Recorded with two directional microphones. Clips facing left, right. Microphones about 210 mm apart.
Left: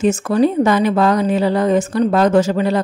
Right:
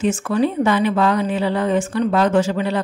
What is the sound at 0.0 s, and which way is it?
Speech, 40° left (ahead or behind).